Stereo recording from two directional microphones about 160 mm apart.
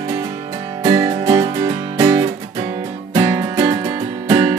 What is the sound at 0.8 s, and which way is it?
Music, 25° right (ahead or behind).